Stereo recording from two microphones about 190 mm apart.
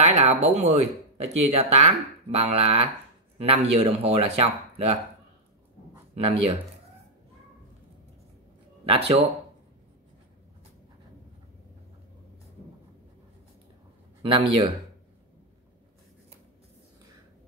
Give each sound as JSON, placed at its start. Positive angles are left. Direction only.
{"t": 0.1, "sound": "speech", "side_deg": -35}
{"t": 6.1, "sound": "speech", "side_deg": -30}
{"t": 8.8, "sound": "speech", "side_deg": -30}
{"t": 14.2, "sound": "speech", "side_deg": -25}